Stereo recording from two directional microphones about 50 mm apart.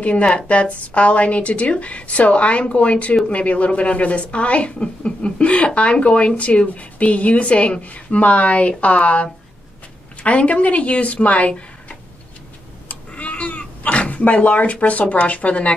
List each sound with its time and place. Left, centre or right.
0.0 s a woman's voice: left
13.1 s cat: left